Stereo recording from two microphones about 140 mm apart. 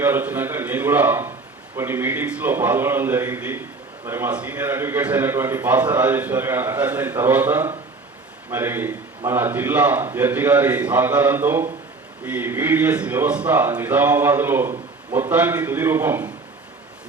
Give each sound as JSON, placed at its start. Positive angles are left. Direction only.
{"t": 0.0, "sound": "speech", "side_deg": -15}